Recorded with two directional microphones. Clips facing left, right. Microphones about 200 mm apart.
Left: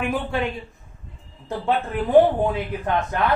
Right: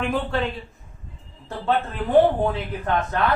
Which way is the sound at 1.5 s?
15° left (ahead or behind).